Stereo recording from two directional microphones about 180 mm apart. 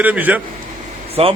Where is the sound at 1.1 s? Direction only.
30° right (ahead or behind).